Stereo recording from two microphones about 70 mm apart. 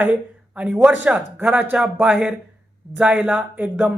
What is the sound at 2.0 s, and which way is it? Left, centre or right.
A man's voice, centre.